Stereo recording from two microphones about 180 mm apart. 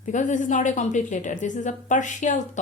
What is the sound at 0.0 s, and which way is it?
A woman's voice, 45° left (ahead or behind).